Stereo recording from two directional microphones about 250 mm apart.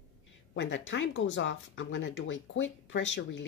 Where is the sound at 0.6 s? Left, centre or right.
Left.